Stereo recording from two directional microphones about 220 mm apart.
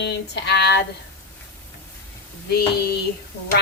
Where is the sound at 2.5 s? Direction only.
45° left (ahead or behind).